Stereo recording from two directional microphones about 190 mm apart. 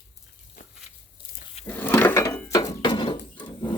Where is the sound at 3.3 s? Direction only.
25° left (ahead or behind).